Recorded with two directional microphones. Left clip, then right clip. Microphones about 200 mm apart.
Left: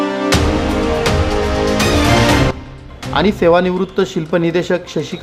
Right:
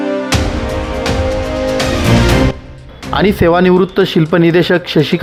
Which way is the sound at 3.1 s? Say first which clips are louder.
Right 1 dB; 30° right (ahead or behind).